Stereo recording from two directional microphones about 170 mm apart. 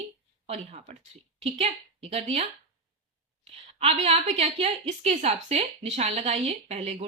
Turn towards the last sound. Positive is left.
turn(degrees=-35)  # may be behind; listen again after turning